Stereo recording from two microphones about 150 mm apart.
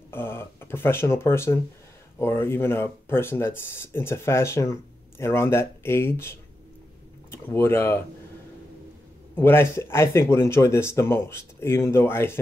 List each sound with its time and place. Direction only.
0.1 s speech: 15° left (ahead or behind)
9.3 s speech: 15° left (ahead or behind)